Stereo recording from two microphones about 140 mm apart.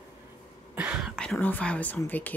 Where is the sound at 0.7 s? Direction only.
10° right (ahead or behind).